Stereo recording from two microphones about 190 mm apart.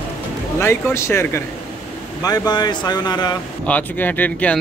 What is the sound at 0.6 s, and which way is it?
Speech, 15° left (ahead or behind).